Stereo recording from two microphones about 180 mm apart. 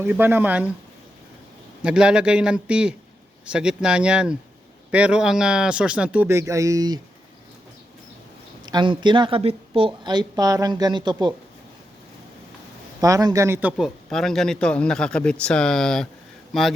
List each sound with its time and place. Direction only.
0.0 s speech: 10° right (ahead or behind)
1.8 s a man's voice: 5° right (ahead or behind); by 7.0 s 20° right (ahead or behind)
8.6 s a woman's voice: 25° right (ahead or behind)
13.0 s a man's voice: 20° right (ahead or behind); by 16.7 s centre (ahead or behind)